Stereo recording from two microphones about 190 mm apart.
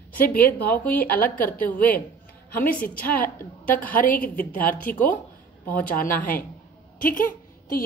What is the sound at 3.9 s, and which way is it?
A woman's voice, 45° left (ahead or behind).